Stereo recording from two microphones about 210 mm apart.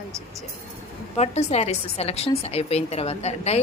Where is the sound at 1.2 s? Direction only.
30° left (ahead or behind).